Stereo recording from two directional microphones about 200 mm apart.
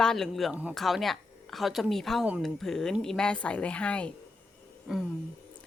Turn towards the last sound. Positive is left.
turn(degrees=0)  # may be behind; listen again after turning